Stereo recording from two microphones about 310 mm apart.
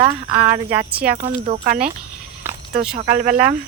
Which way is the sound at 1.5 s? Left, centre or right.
Right.